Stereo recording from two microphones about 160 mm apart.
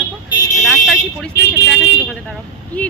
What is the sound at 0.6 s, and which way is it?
Speech, centre (ahead or behind).